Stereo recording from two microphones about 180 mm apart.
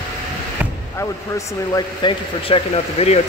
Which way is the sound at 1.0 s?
20° left (ahead or behind).